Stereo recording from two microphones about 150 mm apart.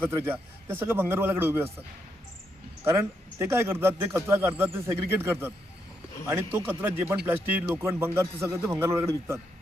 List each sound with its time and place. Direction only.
0.0 s a man's voice: 15° right (ahead or behind)
2.8 s a man's voice: 20° right (ahead or behind)